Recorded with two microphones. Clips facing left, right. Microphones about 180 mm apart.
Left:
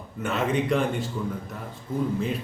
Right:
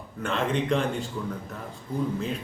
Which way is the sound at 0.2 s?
5° left (ahead or behind).